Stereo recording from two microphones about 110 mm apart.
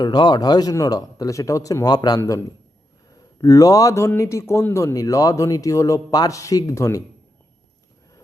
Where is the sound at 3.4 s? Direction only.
30° left (ahead or behind).